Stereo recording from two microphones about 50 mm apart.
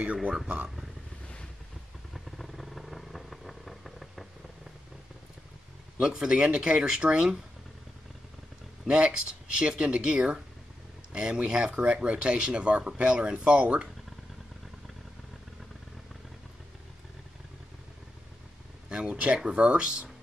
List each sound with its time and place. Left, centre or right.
0.0 s speech: right
2.1 s vehicle: centre
5.9 s speech: centre
8.8 s speech: centre
18.9 s a sound: right
19.3 s speech: centre